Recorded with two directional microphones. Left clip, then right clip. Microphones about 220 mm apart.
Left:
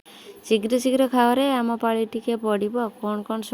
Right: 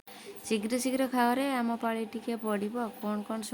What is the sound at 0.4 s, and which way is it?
A woman's voice, 20° left (ahead or behind).